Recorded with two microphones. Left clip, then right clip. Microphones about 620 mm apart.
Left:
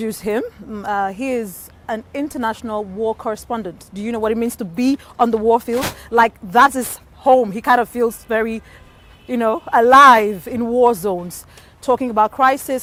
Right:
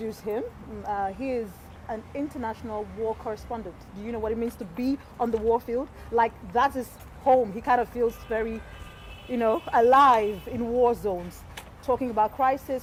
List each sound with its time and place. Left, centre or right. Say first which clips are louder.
0.0 s speech: left 9 dB; left